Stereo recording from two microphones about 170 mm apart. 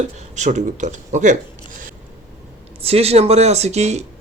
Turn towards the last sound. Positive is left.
turn(degrees=-40)  # may be behind; listen again after turning